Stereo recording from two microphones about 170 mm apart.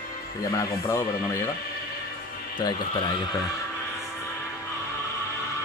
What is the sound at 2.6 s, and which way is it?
Speech, 25° left (ahead or behind).